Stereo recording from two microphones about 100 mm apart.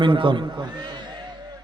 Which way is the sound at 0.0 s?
55° right (ahead or behind).